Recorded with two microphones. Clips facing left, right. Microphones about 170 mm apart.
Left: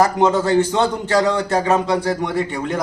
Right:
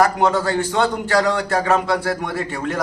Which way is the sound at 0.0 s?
20° left (ahead or behind).